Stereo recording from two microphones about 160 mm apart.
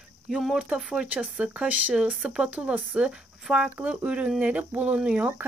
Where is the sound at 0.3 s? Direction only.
Centre (ahead or behind).